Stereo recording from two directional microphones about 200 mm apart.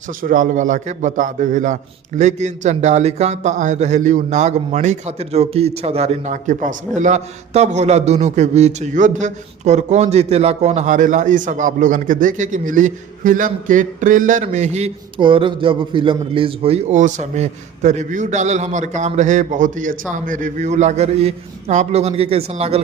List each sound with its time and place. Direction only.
0.2 s a man's voice: 40° right (ahead or behind)